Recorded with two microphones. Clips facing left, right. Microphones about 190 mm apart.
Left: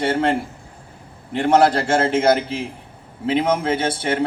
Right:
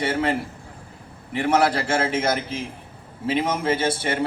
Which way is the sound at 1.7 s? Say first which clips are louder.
Left 4 dB; 55° left (ahead or behind).